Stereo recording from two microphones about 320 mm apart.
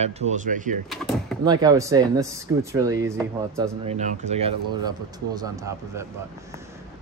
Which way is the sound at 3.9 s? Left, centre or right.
Right.